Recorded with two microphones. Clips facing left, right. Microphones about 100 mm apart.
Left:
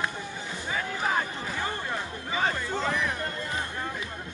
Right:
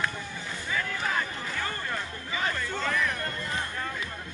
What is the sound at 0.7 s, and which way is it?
Music, 25° left (ahead or behind).